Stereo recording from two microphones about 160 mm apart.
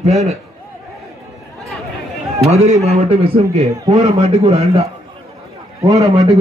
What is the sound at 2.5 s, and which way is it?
A man's voice, 45° right (ahead or behind).